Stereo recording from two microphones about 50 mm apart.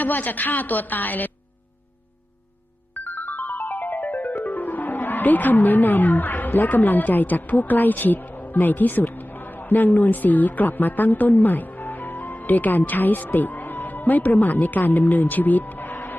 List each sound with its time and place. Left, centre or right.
0.0 s a woman's voice: left
2.9 s music: left
4.4 s speech: left